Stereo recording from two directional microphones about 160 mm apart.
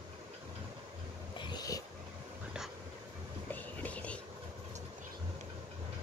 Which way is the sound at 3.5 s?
10° left (ahead or behind).